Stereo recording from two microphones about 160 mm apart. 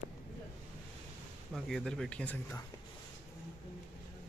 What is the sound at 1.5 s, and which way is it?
Speech, centre (ahead or behind).